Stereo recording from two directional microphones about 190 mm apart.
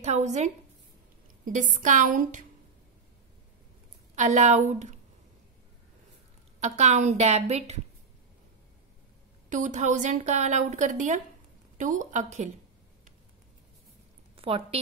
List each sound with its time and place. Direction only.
0.0 s a woman's voice: 40° right (ahead or behind)
4.1 s a woman's voice: 40° right (ahead or behind)
6.6 s a woman's voice: 40° right (ahead or behind)
9.5 s a woman's voice: 40° right (ahead or behind)
14.3 s a woman's voice: 30° right (ahead or behind)